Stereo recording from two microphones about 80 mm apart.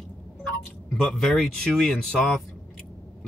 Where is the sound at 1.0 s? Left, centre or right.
Centre.